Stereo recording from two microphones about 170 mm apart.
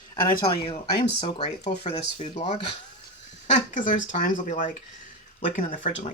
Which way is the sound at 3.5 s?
45° left (ahead or behind).